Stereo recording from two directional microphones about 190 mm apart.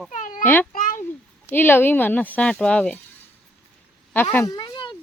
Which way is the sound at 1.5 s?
10° left (ahead or behind).